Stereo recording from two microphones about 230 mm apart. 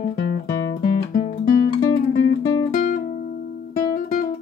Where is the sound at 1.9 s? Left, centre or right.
Left.